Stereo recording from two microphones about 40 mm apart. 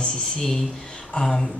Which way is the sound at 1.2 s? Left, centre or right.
Left.